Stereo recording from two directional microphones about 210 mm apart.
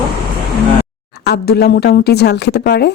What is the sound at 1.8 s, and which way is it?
Speech, 50° left (ahead or behind).